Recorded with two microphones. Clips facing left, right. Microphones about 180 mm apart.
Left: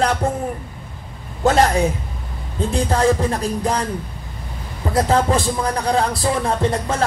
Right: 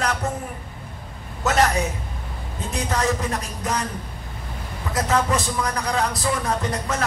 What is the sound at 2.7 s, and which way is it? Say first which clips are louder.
Speech: left 6 dB; 30° left (ahead or behind).